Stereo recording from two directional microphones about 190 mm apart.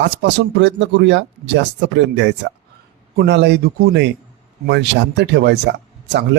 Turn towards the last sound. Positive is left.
turn(degrees=-65)  # may be behind; listen again after turning